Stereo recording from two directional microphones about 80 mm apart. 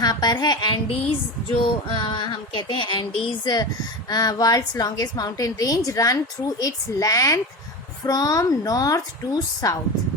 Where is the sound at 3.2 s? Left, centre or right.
Left.